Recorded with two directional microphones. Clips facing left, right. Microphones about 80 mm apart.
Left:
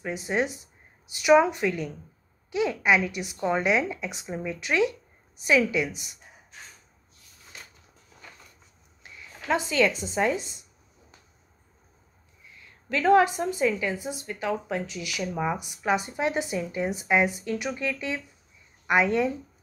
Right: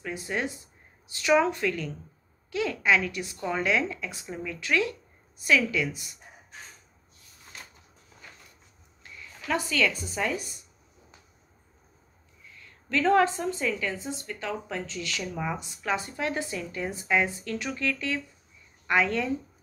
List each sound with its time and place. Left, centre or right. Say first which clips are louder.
0.0 s a woman's voice: left 4 dB; left
9.0 s speech: left 2 dB; left
12.4 s a woman's voice: left 4 dB; centre